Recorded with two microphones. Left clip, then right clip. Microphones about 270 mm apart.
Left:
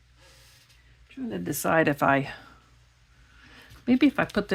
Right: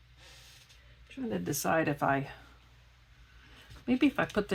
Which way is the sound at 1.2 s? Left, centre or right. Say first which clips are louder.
Left 4 dB; centre.